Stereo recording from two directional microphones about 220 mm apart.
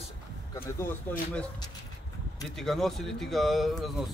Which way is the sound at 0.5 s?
10° left (ahead or behind).